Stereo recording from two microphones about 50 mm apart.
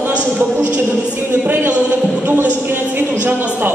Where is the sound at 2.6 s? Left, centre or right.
Right.